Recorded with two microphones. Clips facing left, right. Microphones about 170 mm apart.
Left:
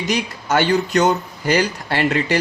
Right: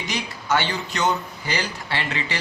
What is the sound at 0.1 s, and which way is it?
Speech, 45° left (ahead or behind).